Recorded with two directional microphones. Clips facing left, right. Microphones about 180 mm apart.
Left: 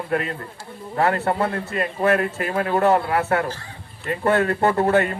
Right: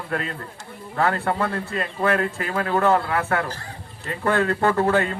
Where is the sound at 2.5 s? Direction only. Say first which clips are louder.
Left 2 dB; 25° left (ahead or behind).